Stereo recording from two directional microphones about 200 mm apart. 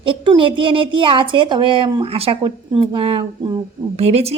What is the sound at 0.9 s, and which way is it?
A woman's voice, 25° right (ahead or behind).